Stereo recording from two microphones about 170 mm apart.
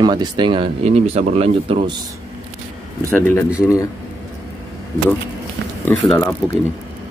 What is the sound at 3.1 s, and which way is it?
Speech, 15° left (ahead or behind).